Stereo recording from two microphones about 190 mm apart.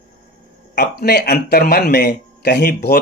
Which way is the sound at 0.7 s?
60° left (ahead or behind).